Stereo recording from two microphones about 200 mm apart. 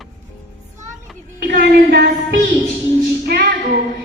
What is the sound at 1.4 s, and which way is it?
Music, 55° right (ahead or behind).